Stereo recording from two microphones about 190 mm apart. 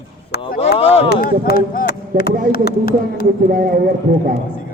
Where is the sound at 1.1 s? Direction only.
55° left (ahead or behind).